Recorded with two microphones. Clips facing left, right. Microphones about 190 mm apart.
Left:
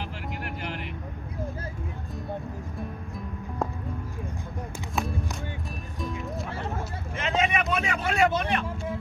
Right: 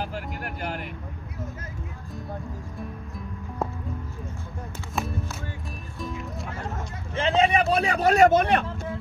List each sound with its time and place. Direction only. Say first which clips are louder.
0.0 s vehicle: right 3 dB; 45° right (ahead or behind)
5.9 s music: even; centre (ahead or behind)
7.2 s vehicle: right 5 dB; 30° right (ahead or behind)
7.7 s speech: right 6 dB; 35° right (ahead or behind)